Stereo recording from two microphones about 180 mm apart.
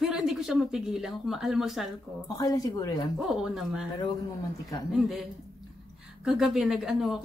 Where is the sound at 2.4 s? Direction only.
20° left (ahead or behind).